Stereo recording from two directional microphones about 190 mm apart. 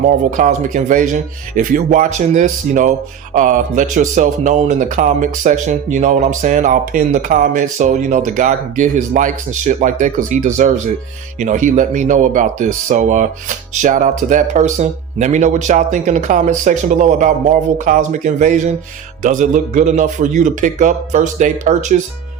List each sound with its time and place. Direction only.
0.0 s speech: 45° right (ahead or behind)